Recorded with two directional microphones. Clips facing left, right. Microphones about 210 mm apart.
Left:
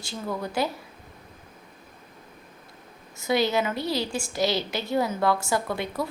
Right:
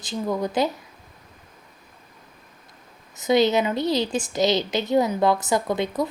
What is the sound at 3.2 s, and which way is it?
A woman's voice, 20° right (ahead or behind).